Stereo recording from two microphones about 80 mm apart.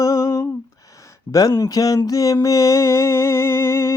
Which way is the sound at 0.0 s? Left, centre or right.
Left.